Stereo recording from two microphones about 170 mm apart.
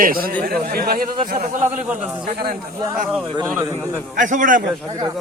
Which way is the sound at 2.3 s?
65° right (ahead or behind).